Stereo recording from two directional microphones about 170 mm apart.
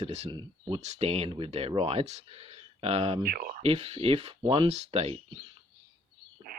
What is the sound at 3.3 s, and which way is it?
Speech, 55° right (ahead or behind).